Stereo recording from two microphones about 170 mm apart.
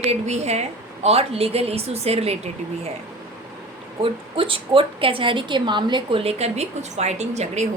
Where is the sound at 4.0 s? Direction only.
30° right (ahead or behind).